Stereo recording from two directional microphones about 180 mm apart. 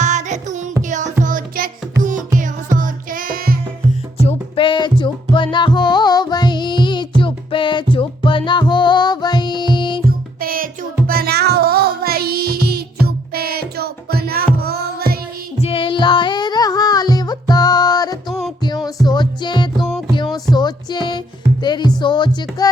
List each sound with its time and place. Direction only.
0.0 s music: 40° right (ahead or behind)
4.2 s music: 30° left (ahead or behind)
10.4 s music: 50° right (ahead or behind)
15.6 s music: 30° left (ahead or behind)
18.3 s music: centre (ahead or behind)
19.0 s music: 25° left (ahead or behind)
19.8 s music: 5° left (ahead or behind)
20.3 s music: 25° left (ahead or behind)